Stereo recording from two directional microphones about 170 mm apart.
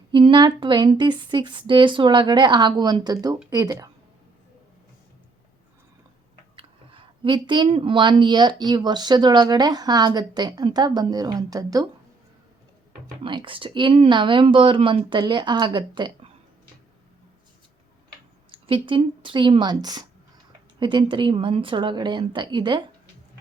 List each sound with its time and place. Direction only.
0.1 s speech: 30° right (ahead or behind)
6.6 s speech: 30° right (ahead or behind)
13.2 s speech: 30° right (ahead or behind)
18.5 s speech: 30° right (ahead or behind)